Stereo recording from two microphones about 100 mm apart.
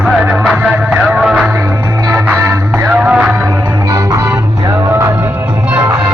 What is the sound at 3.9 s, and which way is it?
Music, 35° right (ahead or behind).